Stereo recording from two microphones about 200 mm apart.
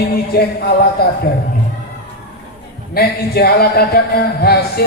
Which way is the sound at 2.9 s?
50° left (ahead or behind).